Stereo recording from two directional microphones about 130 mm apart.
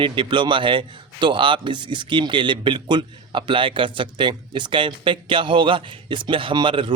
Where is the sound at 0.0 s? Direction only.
40° right (ahead or behind).